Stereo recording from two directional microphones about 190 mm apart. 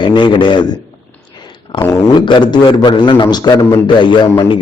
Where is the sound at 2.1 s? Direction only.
25° left (ahead or behind).